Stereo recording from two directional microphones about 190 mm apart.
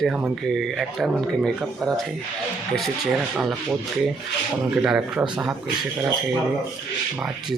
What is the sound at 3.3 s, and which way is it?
Speech, 5° right (ahead or behind).